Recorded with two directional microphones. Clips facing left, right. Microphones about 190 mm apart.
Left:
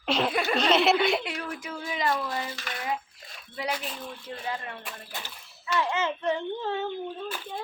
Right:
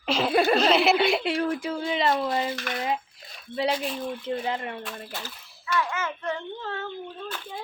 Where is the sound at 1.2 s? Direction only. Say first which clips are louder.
Right 9 dB; 30° right (ahead or behind).